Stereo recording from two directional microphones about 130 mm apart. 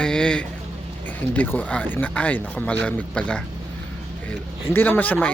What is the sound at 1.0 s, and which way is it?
Speech, 10° left (ahead or behind).